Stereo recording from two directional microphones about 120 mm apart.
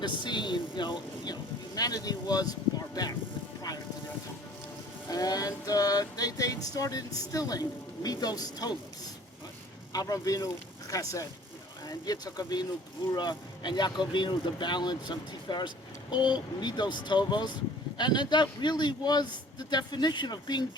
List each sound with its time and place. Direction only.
0.0 s speech: 40° left (ahead or behind)
5.0 s speech: 30° left (ahead or behind)
9.9 s speech: 30° left (ahead or behind)